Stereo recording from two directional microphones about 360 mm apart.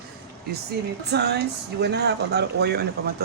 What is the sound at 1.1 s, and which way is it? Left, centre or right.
Speech, right.